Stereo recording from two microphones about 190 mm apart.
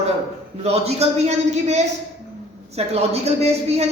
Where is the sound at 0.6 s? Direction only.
35° right (ahead or behind).